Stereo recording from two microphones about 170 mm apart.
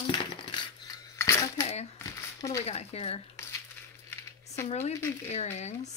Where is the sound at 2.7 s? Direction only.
35° left (ahead or behind).